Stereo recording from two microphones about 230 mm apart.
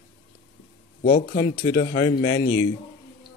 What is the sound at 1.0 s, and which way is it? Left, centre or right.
Speech, left.